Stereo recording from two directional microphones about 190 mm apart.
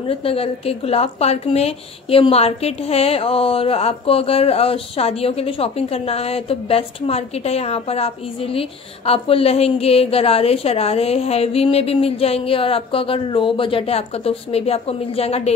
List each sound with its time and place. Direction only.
0.1 s a woman's voice: 30° left (ahead or behind)